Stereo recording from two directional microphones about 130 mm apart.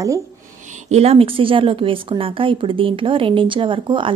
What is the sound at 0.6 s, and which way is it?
A woman's voice, 70° right (ahead or behind).